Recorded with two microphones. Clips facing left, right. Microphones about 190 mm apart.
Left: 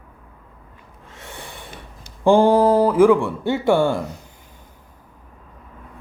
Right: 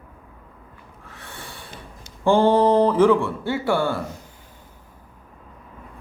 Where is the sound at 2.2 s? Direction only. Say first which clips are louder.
Left 2 dB; 10° left (ahead or behind).